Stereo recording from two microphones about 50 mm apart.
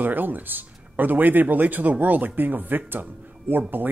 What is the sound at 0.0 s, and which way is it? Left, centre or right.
Speech, right.